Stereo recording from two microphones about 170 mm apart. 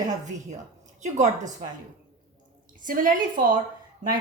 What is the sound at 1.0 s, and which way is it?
Speech, 45° right (ahead or behind).